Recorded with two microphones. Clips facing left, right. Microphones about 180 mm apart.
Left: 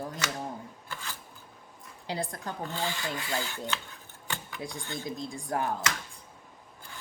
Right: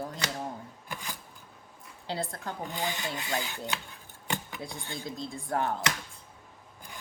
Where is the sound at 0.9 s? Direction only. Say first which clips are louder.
Right 2 dB; 15° right (ahead or behind).